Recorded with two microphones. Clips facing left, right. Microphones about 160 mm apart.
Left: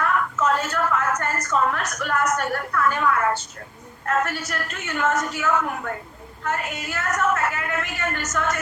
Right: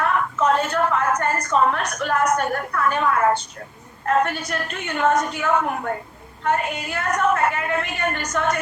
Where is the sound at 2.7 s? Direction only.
30° right (ahead or behind).